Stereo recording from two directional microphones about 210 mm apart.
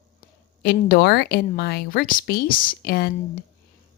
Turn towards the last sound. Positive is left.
turn(degrees=45)  # may be behind; listen again after turning